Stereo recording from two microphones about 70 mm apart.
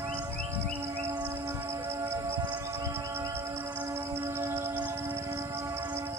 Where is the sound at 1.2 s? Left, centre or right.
Right.